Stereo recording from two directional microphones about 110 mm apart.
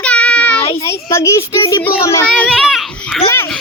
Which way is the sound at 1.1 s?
25° left (ahead or behind).